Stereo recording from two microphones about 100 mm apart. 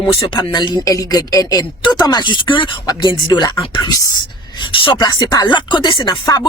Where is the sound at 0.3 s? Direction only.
50° left (ahead or behind).